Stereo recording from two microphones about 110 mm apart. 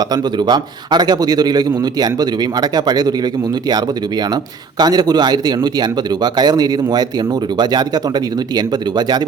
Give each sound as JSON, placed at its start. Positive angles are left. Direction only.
{"t": 0.1, "sound": "a man's voice", "side_deg": -40}
{"t": 4.8, "sound": "a man's voice", "side_deg": -40}